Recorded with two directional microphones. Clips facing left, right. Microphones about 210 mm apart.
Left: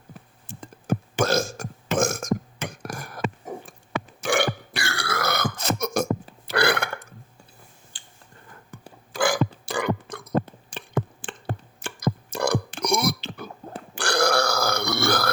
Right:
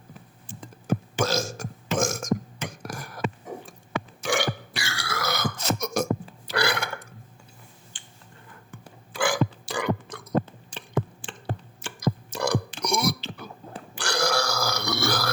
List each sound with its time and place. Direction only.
0.9 s burping: 55° left (ahead or behind)
4.2 s burping: 55° left (ahead or behind)
7.9 s tick-tock: 40° left (ahead or behind)
8.7 s burping: 40° left (ahead or behind)
10.7 s a sound: 55° left (ahead or behind)